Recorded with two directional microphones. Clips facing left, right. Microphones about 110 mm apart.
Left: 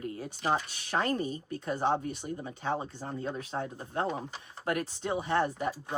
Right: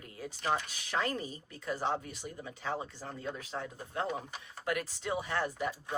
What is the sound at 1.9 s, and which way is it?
Speech, 30° left (ahead or behind).